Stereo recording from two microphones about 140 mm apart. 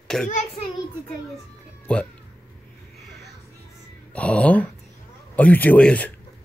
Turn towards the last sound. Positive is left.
turn(degrees=10)  # may be behind; listen again after turning